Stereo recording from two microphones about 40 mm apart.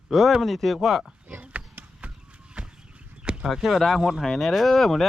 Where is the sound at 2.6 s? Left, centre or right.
Right.